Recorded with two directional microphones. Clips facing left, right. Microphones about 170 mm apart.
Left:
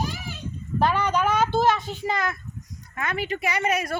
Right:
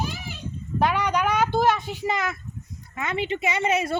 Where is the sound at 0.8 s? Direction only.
15° right (ahead or behind).